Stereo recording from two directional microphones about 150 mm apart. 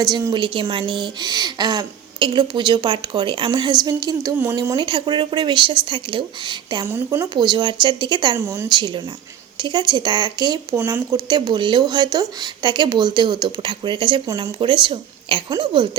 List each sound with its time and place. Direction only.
0.0 s speech: 25° right (ahead or behind)
0.3 s speech: 35° right (ahead or behind)
6.8 s speech: 15° right (ahead or behind)
7.3 s speech: 30° right (ahead or behind)
8.4 s speech: 20° right (ahead or behind)
8.7 s speech: 30° right (ahead or behind)